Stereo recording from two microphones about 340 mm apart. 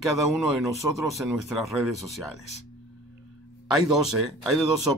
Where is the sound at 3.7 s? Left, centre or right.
Centre.